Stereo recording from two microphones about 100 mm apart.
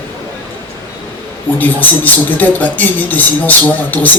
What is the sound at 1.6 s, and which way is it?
Speech, 15° left (ahead or behind).